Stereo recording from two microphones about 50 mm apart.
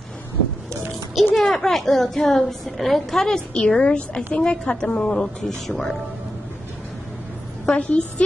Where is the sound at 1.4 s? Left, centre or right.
Centre.